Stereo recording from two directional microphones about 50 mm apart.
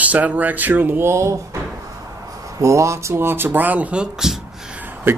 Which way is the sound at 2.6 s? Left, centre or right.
Right.